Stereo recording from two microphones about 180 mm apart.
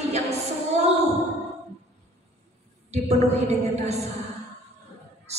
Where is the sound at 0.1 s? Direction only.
40° right (ahead or behind).